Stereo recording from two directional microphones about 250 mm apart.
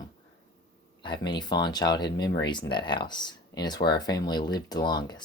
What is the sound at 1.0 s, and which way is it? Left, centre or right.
Speech, centre.